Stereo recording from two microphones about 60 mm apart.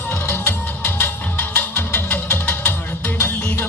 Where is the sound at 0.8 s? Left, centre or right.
Left.